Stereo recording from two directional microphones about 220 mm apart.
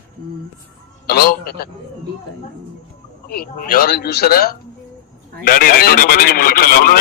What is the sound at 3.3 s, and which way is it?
A man's voice, 40° left (ahead or behind).